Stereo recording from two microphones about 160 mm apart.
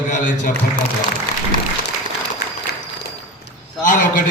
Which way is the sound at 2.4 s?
90° left.